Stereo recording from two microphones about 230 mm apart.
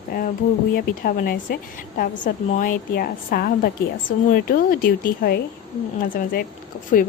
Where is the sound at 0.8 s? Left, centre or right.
Left.